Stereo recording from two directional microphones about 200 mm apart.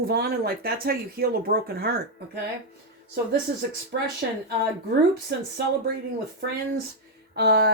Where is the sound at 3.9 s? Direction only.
50° right (ahead or behind).